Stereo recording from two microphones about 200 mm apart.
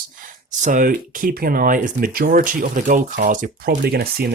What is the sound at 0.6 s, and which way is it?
Speech, 45° right (ahead or behind).